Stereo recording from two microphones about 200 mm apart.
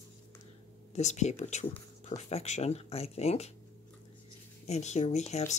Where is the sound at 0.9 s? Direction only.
35° left (ahead or behind).